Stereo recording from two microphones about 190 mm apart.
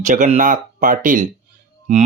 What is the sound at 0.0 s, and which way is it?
Speech, 40° right (ahead or behind).